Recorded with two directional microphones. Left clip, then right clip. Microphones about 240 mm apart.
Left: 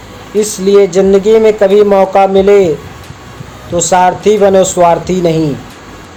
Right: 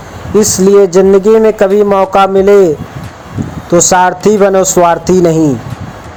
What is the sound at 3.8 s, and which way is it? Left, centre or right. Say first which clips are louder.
Speech: right 1 dB; right.